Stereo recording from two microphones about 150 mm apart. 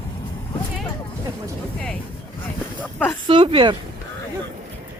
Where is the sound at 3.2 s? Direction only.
35° right (ahead or behind).